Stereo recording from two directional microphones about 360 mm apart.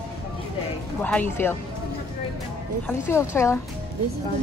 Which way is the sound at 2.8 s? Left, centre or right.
Centre.